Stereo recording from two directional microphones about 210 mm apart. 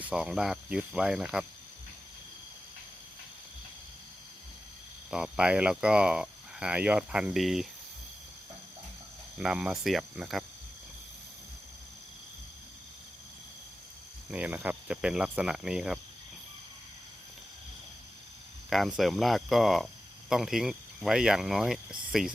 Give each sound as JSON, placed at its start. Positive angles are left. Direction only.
{"t": 0.0, "sound": "speech", "side_deg": -5}
{"t": 5.1, "sound": "speech", "side_deg": -5}
{"t": 9.4, "sound": "speech", "side_deg": -5}
{"t": 14.3, "sound": "speech", "side_deg": -5}
{"t": 18.7, "sound": "speech", "side_deg": 0}